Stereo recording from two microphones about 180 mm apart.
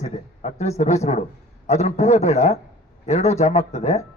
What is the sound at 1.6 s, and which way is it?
A man's voice, 35° left (ahead or behind).